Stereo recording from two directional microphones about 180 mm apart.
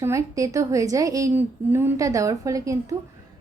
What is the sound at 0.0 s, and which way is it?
A woman's voice, 15° right (ahead or behind).